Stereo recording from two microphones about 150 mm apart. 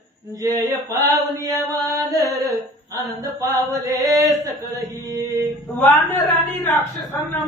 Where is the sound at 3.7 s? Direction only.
25° right (ahead or behind).